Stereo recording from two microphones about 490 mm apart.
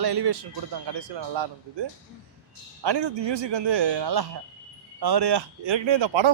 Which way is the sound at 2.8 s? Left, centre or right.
Right.